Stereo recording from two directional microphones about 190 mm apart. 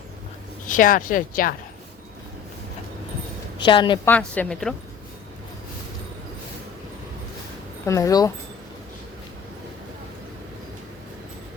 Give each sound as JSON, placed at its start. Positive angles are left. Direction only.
{"t": 0.7, "sound": "speech", "side_deg": 45}
{"t": 3.6, "sound": "a woman's voice", "side_deg": 25}
{"t": 4.0, "sound": "a woman's voice", "side_deg": 10}
{"t": 7.9, "sound": "a woman's voice", "side_deg": 15}